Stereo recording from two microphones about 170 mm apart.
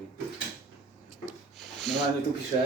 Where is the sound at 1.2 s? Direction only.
Centre (ahead or behind).